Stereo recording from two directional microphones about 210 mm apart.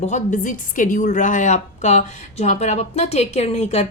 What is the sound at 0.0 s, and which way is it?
A woman's voice, 35° left (ahead or behind).